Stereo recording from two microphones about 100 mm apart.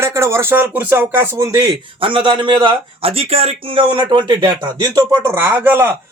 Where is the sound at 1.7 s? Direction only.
60° right (ahead or behind); by 5.2 s 40° right (ahead or behind).